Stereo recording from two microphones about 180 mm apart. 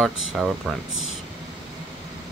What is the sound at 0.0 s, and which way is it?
Speech, centre (ahead or behind).